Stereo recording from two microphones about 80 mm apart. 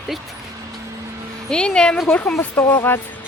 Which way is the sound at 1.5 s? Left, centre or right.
Centre.